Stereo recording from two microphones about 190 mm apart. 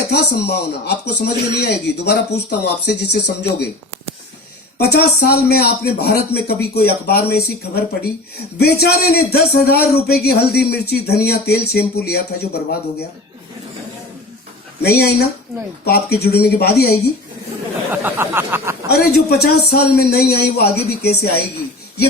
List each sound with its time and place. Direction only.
0.1 s speech: 60° left (ahead or behind)
4.8 s speech: 55° left (ahead or behind)
14.8 s speech: 55° left (ahead or behind)
17.9 s speech: 10° right (ahead or behind)
18.9 s speech: 55° left (ahead or behind)